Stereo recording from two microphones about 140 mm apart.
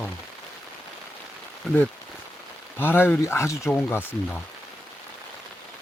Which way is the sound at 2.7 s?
15° left (ahead or behind).